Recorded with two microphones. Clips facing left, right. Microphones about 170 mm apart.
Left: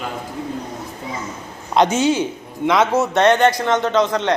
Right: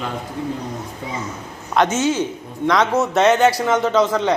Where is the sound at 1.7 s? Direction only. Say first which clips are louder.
Left 2 dB; 15° left (ahead or behind).